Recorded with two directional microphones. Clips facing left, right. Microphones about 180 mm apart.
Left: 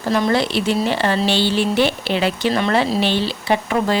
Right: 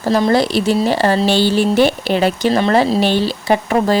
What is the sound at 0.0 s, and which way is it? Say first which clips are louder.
A woman's voice: right 4 dB; 35° right (ahead or behind).